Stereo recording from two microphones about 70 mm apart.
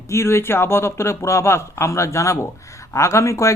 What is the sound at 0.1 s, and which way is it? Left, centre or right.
Speech, left.